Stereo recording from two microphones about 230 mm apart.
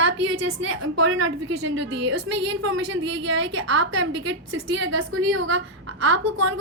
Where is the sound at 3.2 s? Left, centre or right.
Right.